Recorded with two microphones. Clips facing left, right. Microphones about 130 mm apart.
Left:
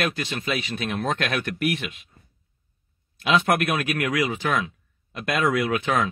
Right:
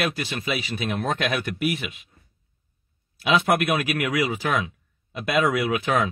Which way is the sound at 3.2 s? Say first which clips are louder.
Even; 5° right (ahead or behind).